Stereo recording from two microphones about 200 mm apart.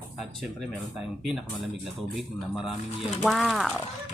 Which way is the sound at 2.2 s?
Centre (ahead or behind).